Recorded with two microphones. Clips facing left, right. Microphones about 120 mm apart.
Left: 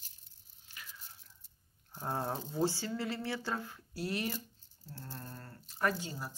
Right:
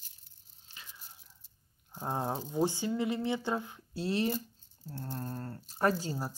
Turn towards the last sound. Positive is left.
turn(degrees=-35)  # may be behind; listen again after turning